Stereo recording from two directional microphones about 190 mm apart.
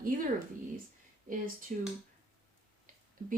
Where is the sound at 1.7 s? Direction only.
45° right (ahead or behind).